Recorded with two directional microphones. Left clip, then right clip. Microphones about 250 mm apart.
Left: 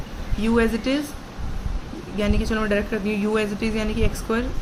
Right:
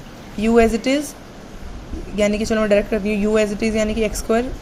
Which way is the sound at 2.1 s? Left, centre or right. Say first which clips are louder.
Right 6 dB; centre.